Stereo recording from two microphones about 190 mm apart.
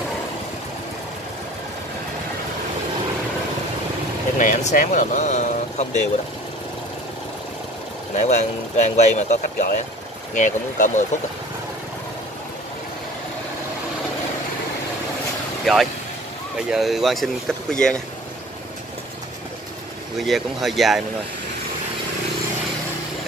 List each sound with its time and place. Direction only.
4.4 s speech: 45° left (ahead or behind)
8.2 s speech: 40° left (ahead or behind)
15.6 s speech: centre (ahead or behind)
20.2 s speech: centre (ahead or behind)